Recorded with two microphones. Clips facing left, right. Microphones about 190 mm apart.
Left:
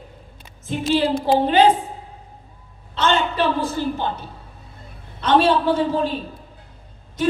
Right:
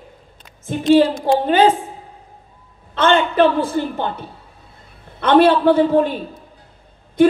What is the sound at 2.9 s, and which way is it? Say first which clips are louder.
A man's voice: right 5 dB; 55° right (ahead or behind).